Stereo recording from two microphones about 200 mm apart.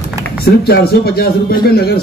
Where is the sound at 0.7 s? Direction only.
50° left (ahead or behind).